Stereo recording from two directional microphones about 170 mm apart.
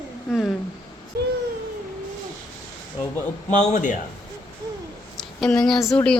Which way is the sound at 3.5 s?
45° left (ahead or behind).